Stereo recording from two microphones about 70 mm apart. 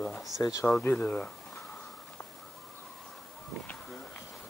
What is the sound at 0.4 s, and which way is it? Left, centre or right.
Speech, left.